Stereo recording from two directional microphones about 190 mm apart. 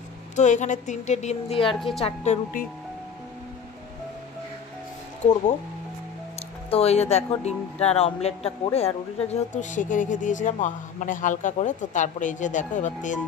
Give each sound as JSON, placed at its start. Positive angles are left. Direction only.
{"t": 0.4, "sound": "speech", "side_deg": 40}
{"t": 5.2, "sound": "speech", "side_deg": 40}
{"t": 6.7, "sound": "speech", "side_deg": 30}